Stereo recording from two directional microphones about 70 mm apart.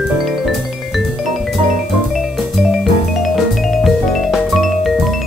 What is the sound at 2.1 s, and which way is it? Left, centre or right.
Music, centre.